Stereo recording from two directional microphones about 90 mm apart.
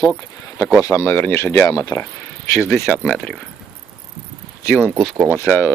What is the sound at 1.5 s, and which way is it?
Speech, 40° left (ahead or behind).